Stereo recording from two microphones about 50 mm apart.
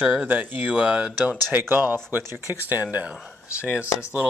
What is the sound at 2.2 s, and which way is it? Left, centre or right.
Speech, right.